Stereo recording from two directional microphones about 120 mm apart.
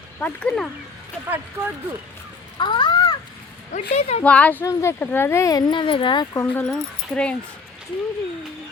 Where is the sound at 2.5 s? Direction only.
40° left (ahead or behind).